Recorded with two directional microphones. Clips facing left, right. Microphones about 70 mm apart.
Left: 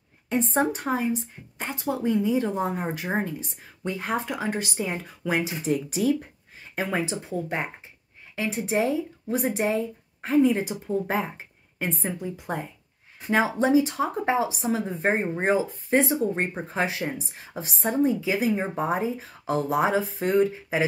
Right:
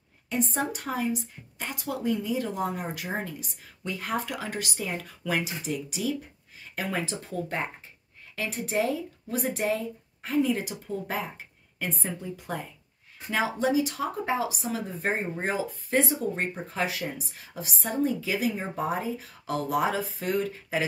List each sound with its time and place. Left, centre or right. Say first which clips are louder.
0.3 s speech: left 5 dB; left